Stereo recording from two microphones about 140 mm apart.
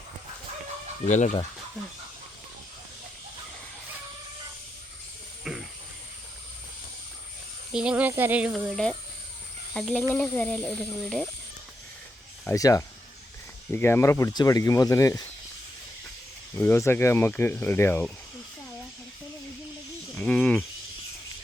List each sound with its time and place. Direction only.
1.0 s speech: 60° left (ahead or behind)
5.5 s hiss: centre (ahead or behind)
7.7 s speech: 5° right (ahead or behind)
12.5 s speech: 25° left (ahead or behind)
16.6 s speech: 15° left (ahead or behind)
20.1 s speech: 5° left (ahead or behind)